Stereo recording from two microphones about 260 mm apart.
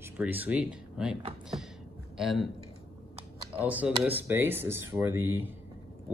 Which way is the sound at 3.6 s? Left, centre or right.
Centre.